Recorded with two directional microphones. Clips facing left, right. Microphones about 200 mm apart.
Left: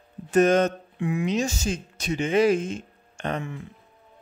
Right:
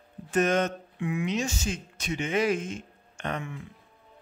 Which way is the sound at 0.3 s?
35° left (ahead or behind).